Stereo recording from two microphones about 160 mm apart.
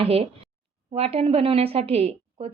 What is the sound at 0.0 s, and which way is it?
Speech, 40° right (ahead or behind).